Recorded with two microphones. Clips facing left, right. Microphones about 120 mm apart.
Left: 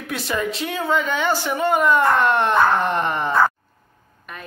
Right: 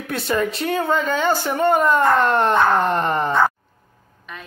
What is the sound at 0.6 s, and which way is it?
Speech, 55° right (ahead or behind).